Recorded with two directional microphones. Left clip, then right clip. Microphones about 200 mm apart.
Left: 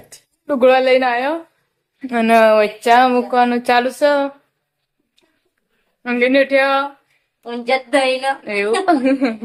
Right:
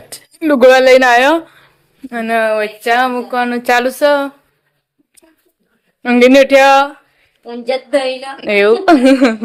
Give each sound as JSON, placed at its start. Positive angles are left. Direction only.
{"t": 0.1, "sound": "speech", "side_deg": -30}
{"t": 2.0, "sound": "speech", "side_deg": 15}
{"t": 3.6, "sound": "speech", "side_deg": -10}
{"t": 6.0, "sound": "speech", "side_deg": -30}
{"t": 7.4, "sound": "a woman's voice", "side_deg": 5}
{"t": 8.4, "sound": "speech", "side_deg": -35}